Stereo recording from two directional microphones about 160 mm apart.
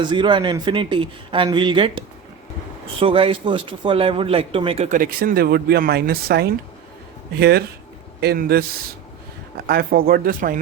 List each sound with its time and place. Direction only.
0.0 s speech: 30° right (ahead or behind)
4.9 s speech: 60° right (ahead or behind); by 6.5 s 75° right (ahead or behind)
7.3 s speech: 90° right
9.6 s speech: 70° right (ahead or behind)